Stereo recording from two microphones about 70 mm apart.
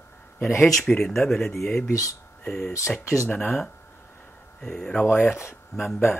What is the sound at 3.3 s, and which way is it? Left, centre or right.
Speech, left.